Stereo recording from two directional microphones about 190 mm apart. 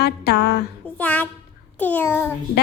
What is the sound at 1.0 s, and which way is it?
Child singing, 10° left (ahead or behind).